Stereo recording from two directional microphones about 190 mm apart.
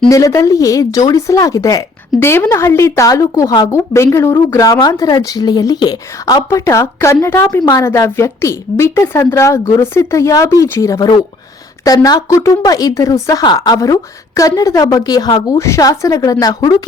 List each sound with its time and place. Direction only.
0.1 s speech: 15° left (ahead or behind)